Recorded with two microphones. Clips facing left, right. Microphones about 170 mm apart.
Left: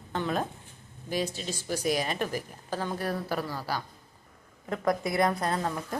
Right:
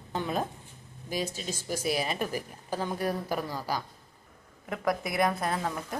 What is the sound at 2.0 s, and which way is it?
A woman's voice, 5° right (ahead or behind).